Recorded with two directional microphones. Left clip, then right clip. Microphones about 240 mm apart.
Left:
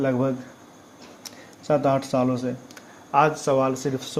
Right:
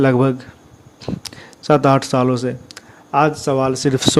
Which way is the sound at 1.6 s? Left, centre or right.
Right.